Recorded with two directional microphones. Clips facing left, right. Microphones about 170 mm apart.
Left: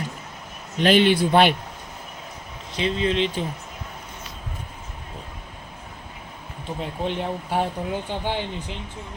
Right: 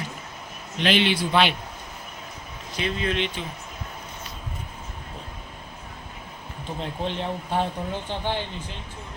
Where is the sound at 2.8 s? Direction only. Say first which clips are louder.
Left 4 dB; 25° left (ahead or behind).